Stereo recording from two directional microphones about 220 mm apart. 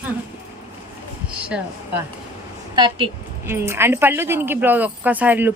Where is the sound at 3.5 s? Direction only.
10° right (ahead or behind).